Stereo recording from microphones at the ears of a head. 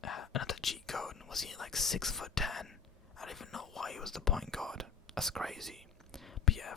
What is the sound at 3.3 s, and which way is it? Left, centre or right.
Whispering, left.